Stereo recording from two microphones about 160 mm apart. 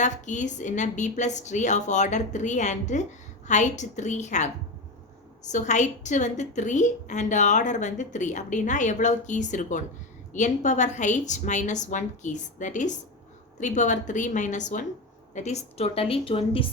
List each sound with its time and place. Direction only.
0.0 s a woman's voice: 50° left (ahead or behind)